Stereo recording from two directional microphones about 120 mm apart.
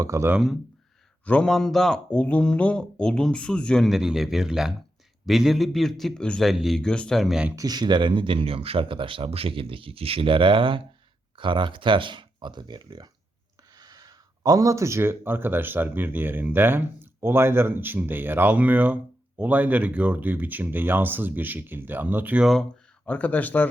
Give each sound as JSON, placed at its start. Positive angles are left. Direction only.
{"t": 0.0, "sound": "speech", "side_deg": -25}
{"t": 1.2, "sound": "speech", "side_deg": 10}
{"t": 7.5, "sound": "speech", "side_deg": -30}
{"t": 23.0, "sound": "speech", "side_deg": 10}